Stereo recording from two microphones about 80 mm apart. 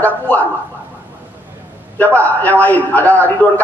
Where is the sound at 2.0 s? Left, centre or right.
Left.